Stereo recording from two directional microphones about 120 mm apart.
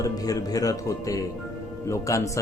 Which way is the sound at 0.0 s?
30° left (ahead or behind).